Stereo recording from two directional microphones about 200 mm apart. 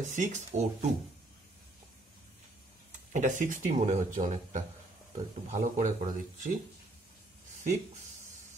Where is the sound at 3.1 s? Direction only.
40° right (ahead or behind).